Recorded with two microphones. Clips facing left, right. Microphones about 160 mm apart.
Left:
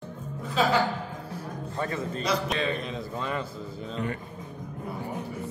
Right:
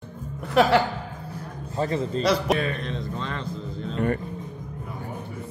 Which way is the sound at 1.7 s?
30° right (ahead or behind).